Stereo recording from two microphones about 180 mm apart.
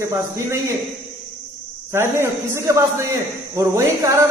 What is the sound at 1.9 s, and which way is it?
A man's voice, 15° right (ahead or behind).